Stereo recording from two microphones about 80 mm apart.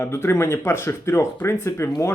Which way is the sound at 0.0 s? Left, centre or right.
Left.